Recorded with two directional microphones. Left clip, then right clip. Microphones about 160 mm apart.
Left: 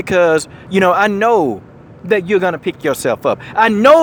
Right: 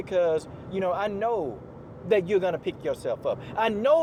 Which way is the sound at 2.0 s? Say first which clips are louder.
Left 9 dB; 35° left (ahead or behind).